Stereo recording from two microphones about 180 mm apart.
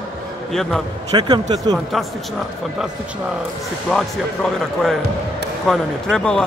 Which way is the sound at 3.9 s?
5° left (ahead or behind).